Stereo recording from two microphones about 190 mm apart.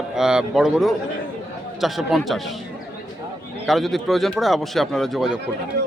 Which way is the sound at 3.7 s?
Centre (ahead or behind).